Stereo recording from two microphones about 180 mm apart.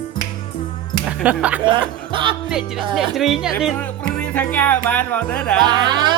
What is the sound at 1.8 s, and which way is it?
Music, 25° right (ahead or behind).